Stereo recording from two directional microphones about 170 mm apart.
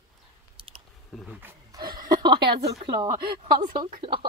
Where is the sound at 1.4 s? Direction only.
10° right (ahead or behind).